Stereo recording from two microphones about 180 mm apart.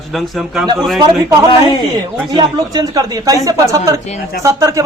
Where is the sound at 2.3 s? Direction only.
25° right (ahead or behind).